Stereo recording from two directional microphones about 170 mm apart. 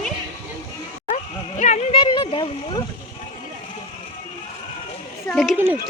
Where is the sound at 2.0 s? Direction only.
25° left (ahead or behind).